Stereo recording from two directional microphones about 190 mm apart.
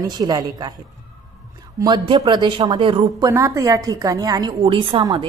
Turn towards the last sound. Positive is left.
turn(degrees=-25)  # may be behind; listen again after turning